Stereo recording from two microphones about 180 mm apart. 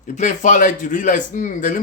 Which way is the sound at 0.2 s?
45° left (ahead or behind).